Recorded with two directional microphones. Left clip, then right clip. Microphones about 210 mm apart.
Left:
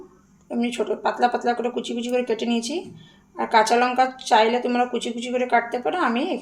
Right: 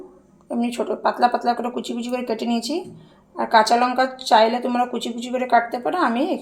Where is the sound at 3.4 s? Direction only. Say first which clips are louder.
Right 2 dB; 5° right (ahead or behind).